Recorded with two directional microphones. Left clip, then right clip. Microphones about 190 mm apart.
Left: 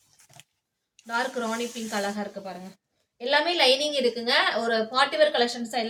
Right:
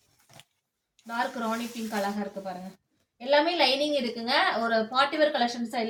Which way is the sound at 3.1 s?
15° left (ahead or behind).